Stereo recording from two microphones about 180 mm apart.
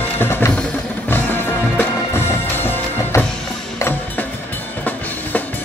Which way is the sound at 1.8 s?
10° left (ahead or behind).